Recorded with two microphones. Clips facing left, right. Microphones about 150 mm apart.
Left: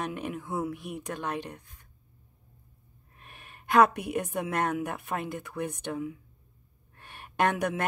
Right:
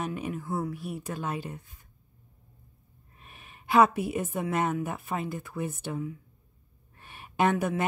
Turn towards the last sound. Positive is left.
turn(degrees=0)  # may be behind; listen again after turning